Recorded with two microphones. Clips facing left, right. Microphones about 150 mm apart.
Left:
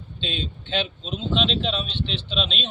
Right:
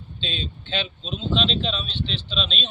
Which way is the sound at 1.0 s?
5° left (ahead or behind).